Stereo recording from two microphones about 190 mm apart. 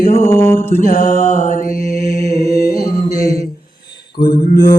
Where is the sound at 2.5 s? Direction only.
50° left (ahead or behind).